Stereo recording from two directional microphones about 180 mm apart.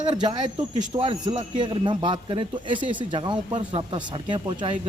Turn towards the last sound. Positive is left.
turn(degrees=-25)  # may be behind; listen again after turning